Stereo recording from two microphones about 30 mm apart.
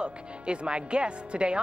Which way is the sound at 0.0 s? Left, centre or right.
Right.